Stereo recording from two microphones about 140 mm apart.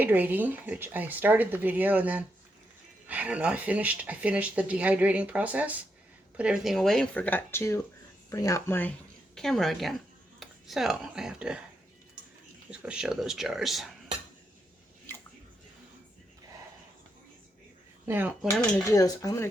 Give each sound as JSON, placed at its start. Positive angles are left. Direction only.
{"t": 0.0, "sound": "a woman's voice", "side_deg": -15}
{"t": 12.8, "sound": "speech", "side_deg": -5}
{"t": 18.1, "sound": "speech", "side_deg": -15}
{"t": 18.6, "sound": "dishes", "side_deg": 25}